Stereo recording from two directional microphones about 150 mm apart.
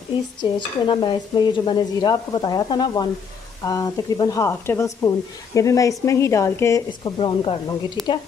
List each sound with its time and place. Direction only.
0.4 s stir: 30° left (ahead or behind)
6.9 s speech: 30° left (ahead or behind)